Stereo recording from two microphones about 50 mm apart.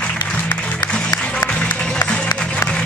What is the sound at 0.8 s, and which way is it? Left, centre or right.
Music, left.